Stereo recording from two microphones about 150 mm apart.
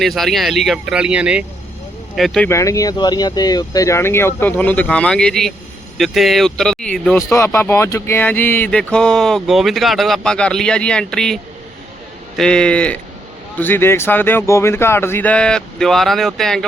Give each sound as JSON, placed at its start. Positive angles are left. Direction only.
{"t": 0.0, "sound": "speech", "side_deg": 0}
{"t": 2.5, "sound": "speech", "side_deg": 20}
{"t": 7.3, "sound": "speech", "side_deg": 20}
{"t": 12.4, "sound": "speech", "side_deg": 5}